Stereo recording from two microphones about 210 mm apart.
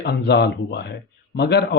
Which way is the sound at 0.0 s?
55° left (ahead or behind).